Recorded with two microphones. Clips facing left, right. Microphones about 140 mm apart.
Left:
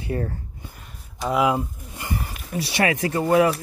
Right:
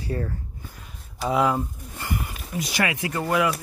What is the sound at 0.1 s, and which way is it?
Speech, 25° left (ahead or behind).